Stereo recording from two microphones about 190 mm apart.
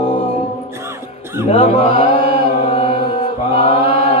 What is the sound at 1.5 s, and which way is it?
Chant, 30° left (ahead or behind).